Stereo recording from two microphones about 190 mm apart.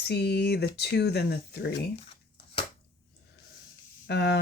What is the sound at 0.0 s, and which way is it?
Speech, 60° left (ahead or behind).